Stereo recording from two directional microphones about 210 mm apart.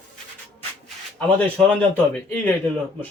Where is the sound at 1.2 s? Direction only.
5° left (ahead or behind).